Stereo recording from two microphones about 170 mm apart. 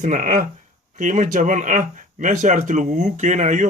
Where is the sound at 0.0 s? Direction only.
45° right (ahead or behind).